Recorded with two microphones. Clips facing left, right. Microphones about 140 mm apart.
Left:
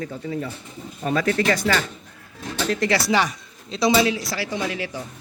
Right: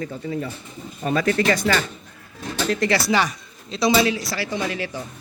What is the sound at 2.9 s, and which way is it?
Speech, 25° left (ahead or behind).